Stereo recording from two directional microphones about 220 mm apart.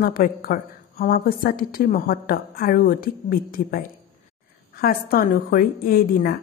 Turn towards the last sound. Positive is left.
turn(degrees=40)  # may be behind; listen again after turning